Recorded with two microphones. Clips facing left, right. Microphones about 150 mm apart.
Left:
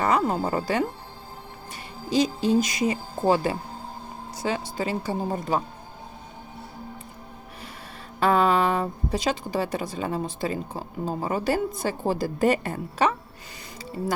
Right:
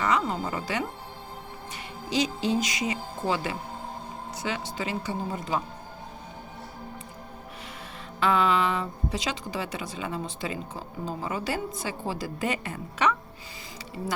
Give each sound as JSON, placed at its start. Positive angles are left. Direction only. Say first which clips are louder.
{"t": 0.0, "sound": "speech", "louder": "left 4 dB", "side_deg": 45}
{"t": 2.0, "sound": "a woman's voice", "louder": "left 4 dB", "side_deg": 45}
{"t": 8.2, "sound": "speech", "louder": "left 3 dB", "side_deg": 45}